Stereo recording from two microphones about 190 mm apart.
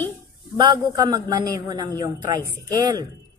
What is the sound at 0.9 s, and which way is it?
A woman's voice, 20° right (ahead or behind).